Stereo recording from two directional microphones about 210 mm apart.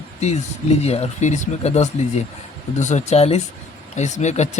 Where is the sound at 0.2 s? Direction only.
30° left (ahead or behind).